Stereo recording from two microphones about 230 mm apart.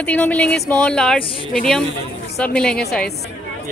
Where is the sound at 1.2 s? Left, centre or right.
Left.